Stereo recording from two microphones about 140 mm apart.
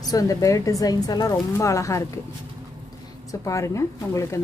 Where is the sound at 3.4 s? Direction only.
20° left (ahead or behind).